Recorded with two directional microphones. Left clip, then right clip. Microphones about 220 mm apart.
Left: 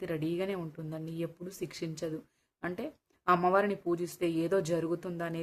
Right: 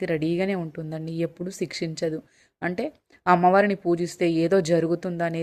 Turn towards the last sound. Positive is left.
turn(degrees=-25)  # may be behind; listen again after turning